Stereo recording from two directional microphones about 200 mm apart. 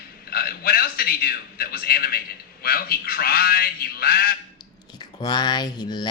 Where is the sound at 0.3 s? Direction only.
50° left (ahead or behind).